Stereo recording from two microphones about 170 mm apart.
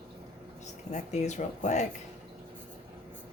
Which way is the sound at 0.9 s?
45° left (ahead or behind).